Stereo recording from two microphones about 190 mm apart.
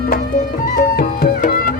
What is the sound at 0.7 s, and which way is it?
Music, 50° left (ahead or behind).